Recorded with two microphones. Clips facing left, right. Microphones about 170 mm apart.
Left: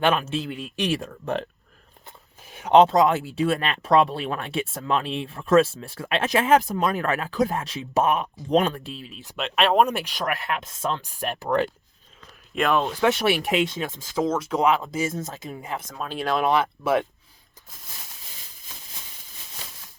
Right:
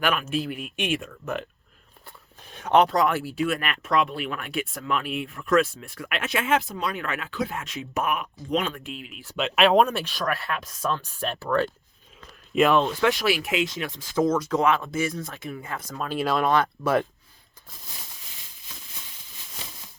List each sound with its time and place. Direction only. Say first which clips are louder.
0.0 s speech: left 3 dB; 25° left (ahead or behind)
2.5 s a sound: left 1 dB; 10° left (ahead or behind)
2.7 s speech: left 4 dB; 20° left (ahead or behind)
9.3 s speech: right 2 dB; centre (ahead or behind)
9.8 s speech: left 1 dB; 15° left (ahead or behind)
11.0 s speech: left 1 dB; 15° left (ahead or behind)
12.5 s speech: right 3 dB; 5° right (ahead or behind)
12.8 s speech: even; 10° left (ahead or behind)
13.1 s speech: left 2 dB; 30° left (ahead or behind)
14.4 s speech: left 1 dB; 15° left (ahead or behind)
15.2 s speech: left 2 dB; 40° left (ahead or behind)
15.4 s speech: left 1 dB; 15° left (ahead or behind)
16.0 s speech: right 1 dB; 5° right (ahead or behind)
16.4 s speech: left 2 dB; 5° left (ahead or behind)